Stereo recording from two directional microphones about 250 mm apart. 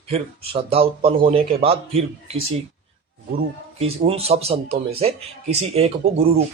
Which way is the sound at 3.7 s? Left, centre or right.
Right.